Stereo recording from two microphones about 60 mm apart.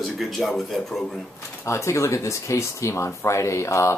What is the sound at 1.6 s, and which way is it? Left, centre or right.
Speech, left.